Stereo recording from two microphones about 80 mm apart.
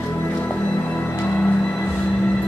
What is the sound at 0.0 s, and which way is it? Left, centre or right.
Music, left.